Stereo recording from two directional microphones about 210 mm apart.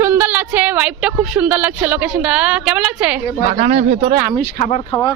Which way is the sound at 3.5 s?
30° right (ahead or behind).